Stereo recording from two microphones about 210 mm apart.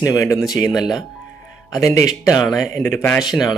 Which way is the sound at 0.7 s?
Centre (ahead or behind).